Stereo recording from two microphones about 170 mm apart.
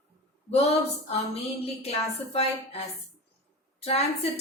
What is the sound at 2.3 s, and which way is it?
A woman's voice, 35° left (ahead or behind).